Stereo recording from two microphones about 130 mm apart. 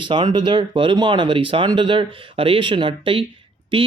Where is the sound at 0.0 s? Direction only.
35° right (ahead or behind).